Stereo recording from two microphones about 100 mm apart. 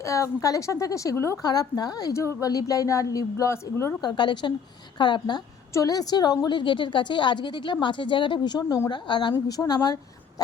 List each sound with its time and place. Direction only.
0.0 s a woman's voice: 30° left (ahead or behind)
1.4 s a woman's voice: 40° left (ahead or behind)
4.0 s a woman's voice: 50° left (ahead or behind)
5.7 s a woman's voice: 35° left (ahead or behind)